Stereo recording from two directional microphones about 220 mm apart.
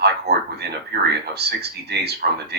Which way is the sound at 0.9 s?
50° right (ahead or behind).